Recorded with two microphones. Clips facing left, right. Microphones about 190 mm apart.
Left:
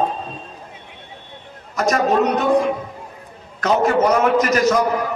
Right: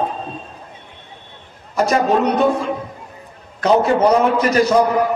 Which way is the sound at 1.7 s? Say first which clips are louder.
Right 2 dB; 30° right (ahead or behind).